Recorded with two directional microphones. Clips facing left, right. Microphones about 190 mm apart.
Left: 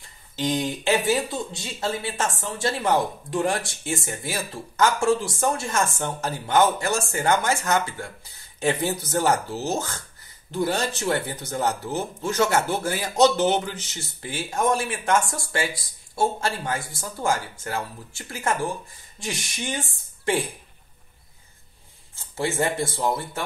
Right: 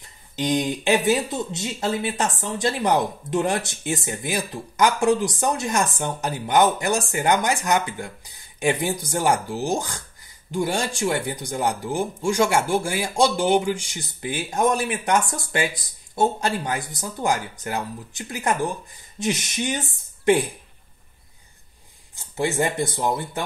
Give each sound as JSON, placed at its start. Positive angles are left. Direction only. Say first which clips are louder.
{"t": 0.4, "sound": "speech", "louder": "right 2 dB", "side_deg": -15}
{"t": 22.1, "sound": "speech", "louder": "right 3 dB", "side_deg": -15}